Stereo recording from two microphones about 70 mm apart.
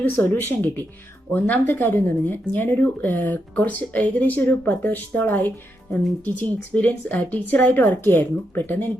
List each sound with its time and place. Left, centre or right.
0.0 s speech: left